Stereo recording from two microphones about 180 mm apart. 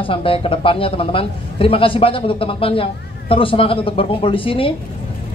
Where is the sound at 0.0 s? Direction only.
30° left (ahead or behind).